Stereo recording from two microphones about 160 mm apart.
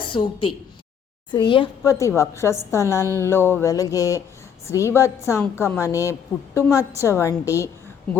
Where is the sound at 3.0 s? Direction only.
20° right (ahead or behind).